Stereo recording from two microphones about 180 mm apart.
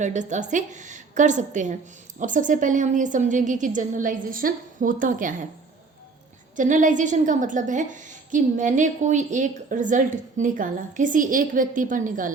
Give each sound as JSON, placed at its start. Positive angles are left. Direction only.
{"t": 0.0, "sound": "a woman's voice", "side_deg": -40}
{"t": 6.6, "sound": "a woman's voice", "side_deg": -45}